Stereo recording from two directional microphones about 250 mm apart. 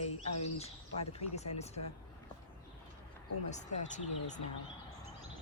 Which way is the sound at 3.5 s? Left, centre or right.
Left.